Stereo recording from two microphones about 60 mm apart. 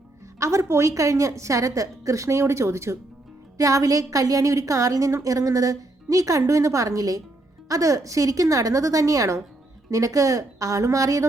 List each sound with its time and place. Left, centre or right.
0.3 s a woman's voice: right
3.6 s a woman's voice: right
6.5 s a woman's voice: right
9.9 s a woman's voice: right